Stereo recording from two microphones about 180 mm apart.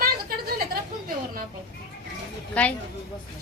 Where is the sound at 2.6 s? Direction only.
5° left (ahead or behind).